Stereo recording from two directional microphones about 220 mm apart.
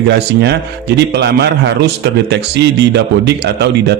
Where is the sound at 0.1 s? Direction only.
50° right (ahead or behind).